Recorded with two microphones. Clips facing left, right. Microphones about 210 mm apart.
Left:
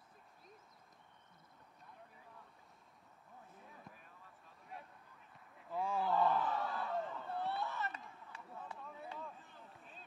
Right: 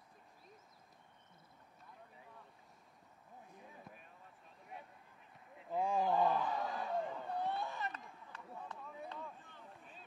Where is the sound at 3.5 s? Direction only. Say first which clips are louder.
Right 3 dB; 15° right (ahead or behind).